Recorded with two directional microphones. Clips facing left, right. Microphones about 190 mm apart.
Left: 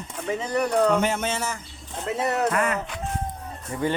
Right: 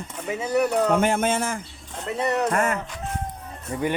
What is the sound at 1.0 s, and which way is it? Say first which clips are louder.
Speech: right 4 dB; 50° right (ahead or behind).